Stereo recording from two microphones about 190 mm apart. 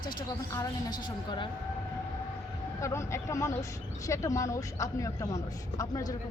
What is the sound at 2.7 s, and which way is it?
Speech, 15° left (ahead or behind).